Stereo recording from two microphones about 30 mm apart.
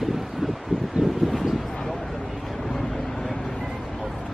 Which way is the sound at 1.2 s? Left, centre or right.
Centre.